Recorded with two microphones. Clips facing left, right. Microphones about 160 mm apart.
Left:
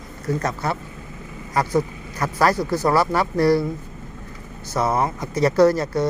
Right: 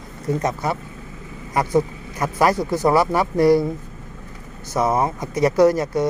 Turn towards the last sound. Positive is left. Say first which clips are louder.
# right 1 dB
turn(degrees=-15)  # may be behind; listen again after turning